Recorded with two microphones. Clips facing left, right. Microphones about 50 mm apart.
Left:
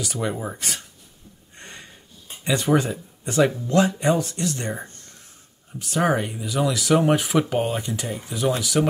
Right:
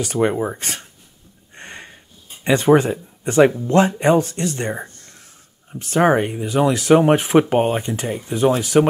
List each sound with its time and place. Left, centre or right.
0.0 s speech: right
1.5 s a sound: right
2.4 s speech: right